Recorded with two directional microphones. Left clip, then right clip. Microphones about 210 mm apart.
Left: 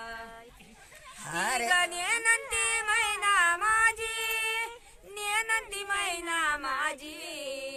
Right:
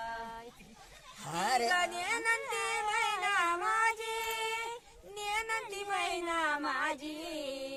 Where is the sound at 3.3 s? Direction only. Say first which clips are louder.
Left 8 dB; 10° right (ahead or behind).